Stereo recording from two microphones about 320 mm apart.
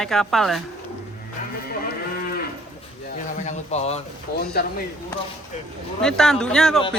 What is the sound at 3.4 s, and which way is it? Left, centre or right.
Speech, centre.